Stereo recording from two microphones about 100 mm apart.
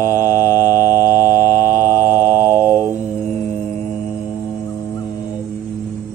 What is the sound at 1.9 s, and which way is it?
Music, 25° right (ahead or behind).